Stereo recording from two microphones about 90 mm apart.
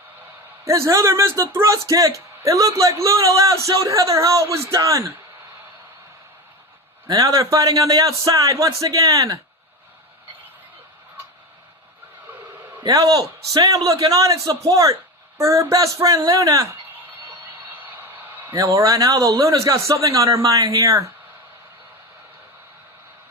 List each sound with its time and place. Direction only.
0.6 s speech: 35° right (ahead or behind)
7.1 s speech: 40° right (ahead or behind)
12.8 s a man's voice: 40° right (ahead or behind)
17.7 s vehicle: 20° right (ahead or behind)
18.5 s a man's voice: 40° right (ahead or behind)